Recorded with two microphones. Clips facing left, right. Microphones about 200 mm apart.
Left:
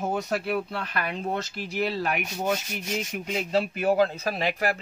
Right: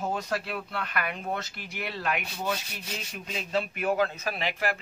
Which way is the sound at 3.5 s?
30° left (ahead or behind).